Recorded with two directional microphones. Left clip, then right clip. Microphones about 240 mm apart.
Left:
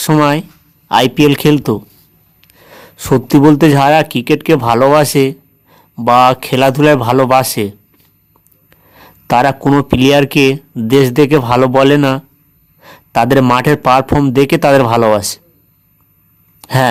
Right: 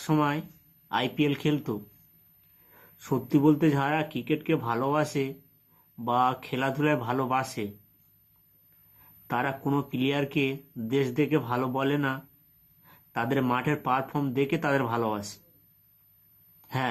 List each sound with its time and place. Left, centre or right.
0.0 s speech: left
2.7 s speech: left
9.2 s speech: left
16.6 s a sound: left